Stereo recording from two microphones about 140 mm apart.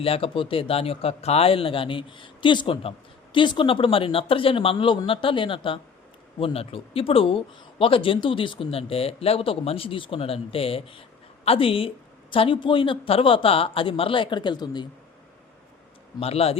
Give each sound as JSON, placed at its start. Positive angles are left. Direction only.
{"t": 0.0, "sound": "speech", "side_deg": 40}
{"t": 16.2, "sound": "speech", "side_deg": 45}